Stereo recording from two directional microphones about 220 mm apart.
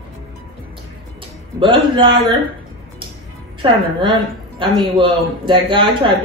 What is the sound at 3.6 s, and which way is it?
A woman's voice, 20° right (ahead or behind).